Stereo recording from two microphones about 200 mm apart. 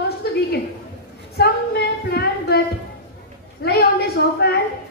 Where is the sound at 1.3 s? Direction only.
55° left (ahead or behind).